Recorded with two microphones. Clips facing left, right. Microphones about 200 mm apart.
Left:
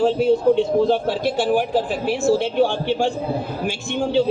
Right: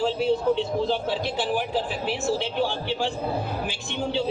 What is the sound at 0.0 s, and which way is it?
A man's voice, 50° left (ahead or behind).